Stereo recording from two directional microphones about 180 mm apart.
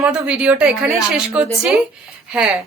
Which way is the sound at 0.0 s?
5° right (ahead or behind).